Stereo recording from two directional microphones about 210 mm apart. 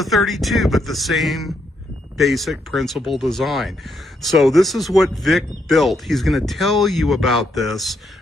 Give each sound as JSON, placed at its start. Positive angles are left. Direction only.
{"t": 0.0, "sound": "speech", "side_deg": 0}